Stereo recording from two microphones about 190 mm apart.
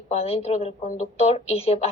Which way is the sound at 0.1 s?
35° left (ahead or behind).